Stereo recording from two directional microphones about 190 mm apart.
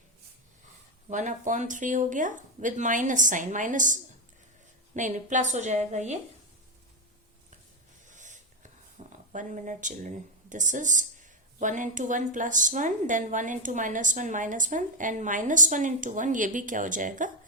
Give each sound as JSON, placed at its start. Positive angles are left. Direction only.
{"t": 1.1, "sound": "speech", "side_deg": -40}
{"t": 4.9, "sound": "a woman's voice", "side_deg": -40}
{"t": 8.0, "sound": "a sound", "side_deg": -40}
{"t": 9.3, "sound": "speech", "side_deg": -40}